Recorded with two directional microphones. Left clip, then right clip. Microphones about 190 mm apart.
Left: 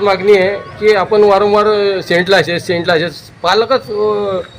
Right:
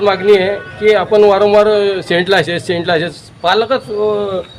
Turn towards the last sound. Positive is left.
turn(degrees=-10)  # may be behind; listen again after turning